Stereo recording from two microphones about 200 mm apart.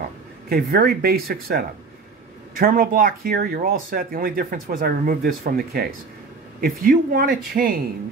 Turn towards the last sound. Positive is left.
turn(degrees=-45)  # may be behind; listen again after turning